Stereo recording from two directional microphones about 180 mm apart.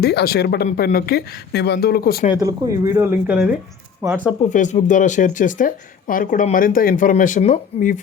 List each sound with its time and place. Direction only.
0.0 s speech: 65° left (ahead or behind)
2.4 s speech: 20° right (ahead or behind)
4.0 s speech: 15° right (ahead or behind)
4.4 s speech: 45° left (ahead or behind)